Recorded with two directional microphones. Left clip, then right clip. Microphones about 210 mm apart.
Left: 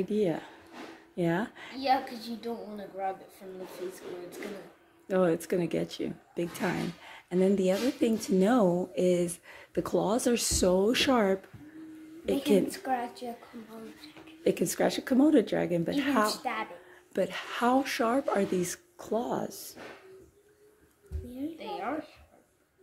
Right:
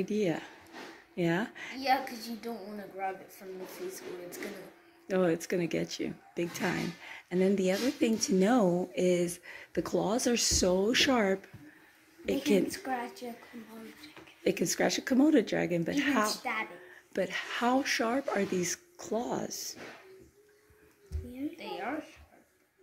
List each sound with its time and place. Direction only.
0.0 s speech: 5° left (ahead or behind)
1.8 s speech: 10° right (ahead or behind)
5.0 s speech: 5° left (ahead or behind)
14.4 s speech: 5° left (ahead or behind)
21.6 s a sound: 5° right (ahead or behind)